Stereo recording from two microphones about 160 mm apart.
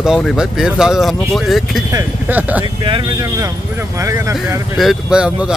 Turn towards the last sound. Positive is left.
turn(degrees=-5)  # may be behind; listen again after turning